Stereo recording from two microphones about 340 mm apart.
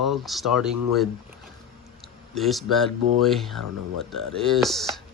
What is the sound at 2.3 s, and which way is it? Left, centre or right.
Speech, centre.